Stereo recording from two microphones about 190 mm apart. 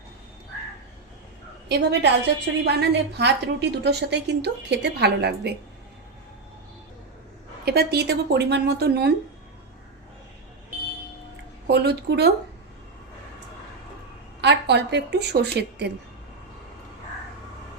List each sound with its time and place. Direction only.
1.6 s a woman's voice: 65° right (ahead or behind)
7.6 s a woman's voice: 55° right (ahead or behind)
11.7 s a woman's voice: 60° right (ahead or behind)
14.4 s a woman's voice: 65° right (ahead or behind)